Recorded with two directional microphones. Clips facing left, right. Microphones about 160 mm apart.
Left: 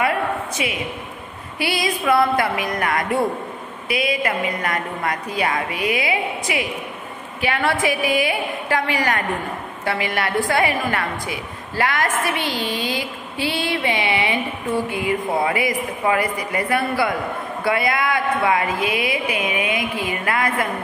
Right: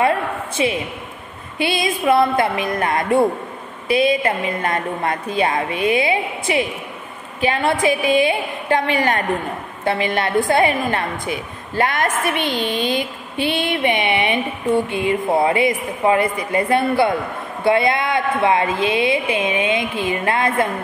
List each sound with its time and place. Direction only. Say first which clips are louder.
0.6 s a man's voice: right 9 dB; 30° right (ahead or behind)
1.6 s a woman's voice: right 3 dB; 20° right (ahead or behind)